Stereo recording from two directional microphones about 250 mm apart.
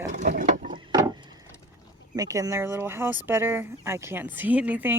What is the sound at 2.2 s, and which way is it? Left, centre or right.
Speech, centre.